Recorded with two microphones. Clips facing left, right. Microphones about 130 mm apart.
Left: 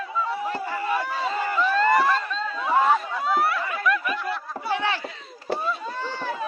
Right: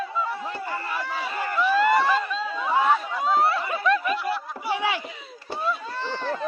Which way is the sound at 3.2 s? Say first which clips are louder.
Right 1 dB; 25° right (ahead or behind).